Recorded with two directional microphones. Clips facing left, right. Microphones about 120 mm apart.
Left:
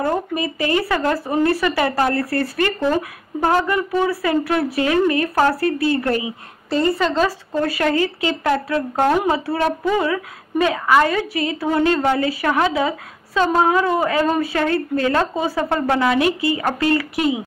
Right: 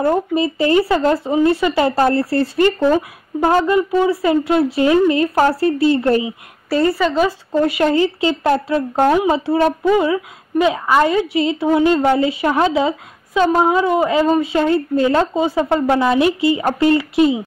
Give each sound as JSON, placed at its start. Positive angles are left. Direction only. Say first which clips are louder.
{"t": 0.0, "sound": "a woman's voice", "louder": "right 5 dB", "side_deg": -30}
{"t": 6.7, "sound": "speech", "louder": "right 2 dB", "side_deg": -5}
{"t": 7.2, "sound": "a woman's voice", "louder": "right 4 dB", "side_deg": -20}
{"t": 9.0, "sound": "speech", "louder": "right 3 dB", "side_deg": -5}
{"t": 9.3, "sound": "a woman's voice", "louder": "right 4 dB", "side_deg": -20}